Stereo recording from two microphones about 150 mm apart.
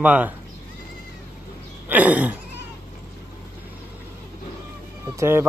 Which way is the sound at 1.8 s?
10° right (ahead or behind).